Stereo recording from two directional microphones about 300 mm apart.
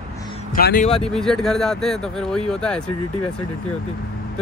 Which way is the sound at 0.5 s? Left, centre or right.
Left.